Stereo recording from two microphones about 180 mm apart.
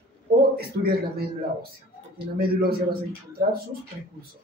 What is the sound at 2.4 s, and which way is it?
Speech, 60° right (ahead or behind).